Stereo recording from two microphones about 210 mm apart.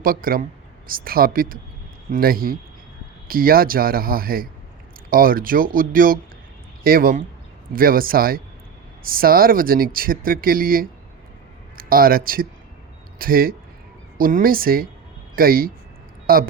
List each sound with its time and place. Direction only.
0.0 s speech: 45° right (ahead or behind)